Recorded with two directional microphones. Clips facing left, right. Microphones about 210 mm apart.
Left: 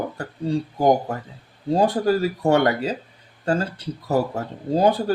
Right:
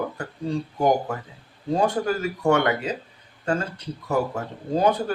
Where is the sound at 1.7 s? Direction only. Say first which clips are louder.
Left 4 dB; 35° left (ahead or behind).